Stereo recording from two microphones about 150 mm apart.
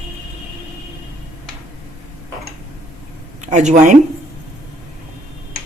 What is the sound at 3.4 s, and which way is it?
Speech, 50° right (ahead or behind).